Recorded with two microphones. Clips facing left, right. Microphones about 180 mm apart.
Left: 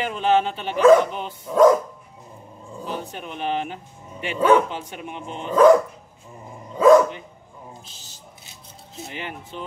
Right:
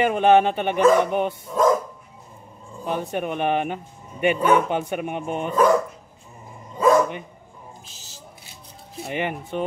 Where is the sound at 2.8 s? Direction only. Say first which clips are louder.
Right 6 dB; 60° right (ahead or behind).